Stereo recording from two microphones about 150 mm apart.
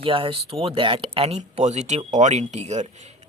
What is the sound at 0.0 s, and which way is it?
A man's voice, 35° right (ahead or behind).